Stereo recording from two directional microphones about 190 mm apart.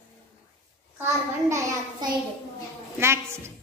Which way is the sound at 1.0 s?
15° right (ahead or behind).